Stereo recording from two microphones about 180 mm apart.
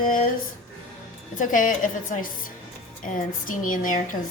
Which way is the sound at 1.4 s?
45° left (ahead or behind).